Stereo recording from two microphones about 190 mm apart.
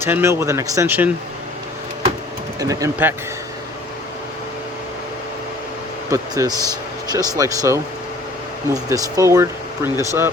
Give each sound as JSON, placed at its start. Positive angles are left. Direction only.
{"t": 0.0, "sound": "speech", "side_deg": -10}
{"t": 2.6, "sound": "speech", "side_deg": -15}
{"t": 6.1, "sound": "speech", "side_deg": -15}